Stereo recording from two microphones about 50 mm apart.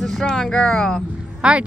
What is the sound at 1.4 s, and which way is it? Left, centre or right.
Speech, centre.